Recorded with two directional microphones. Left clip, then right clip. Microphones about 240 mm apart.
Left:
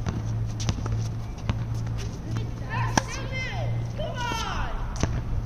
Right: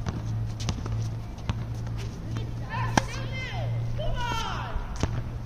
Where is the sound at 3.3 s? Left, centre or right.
Centre.